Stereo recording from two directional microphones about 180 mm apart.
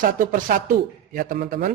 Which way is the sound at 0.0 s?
50° right (ahead or behind).